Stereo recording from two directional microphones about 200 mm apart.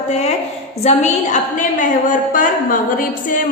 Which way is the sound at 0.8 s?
35° left (ahead or behind).